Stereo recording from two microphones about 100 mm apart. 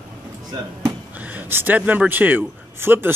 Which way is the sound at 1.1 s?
15° right (ahead or behind).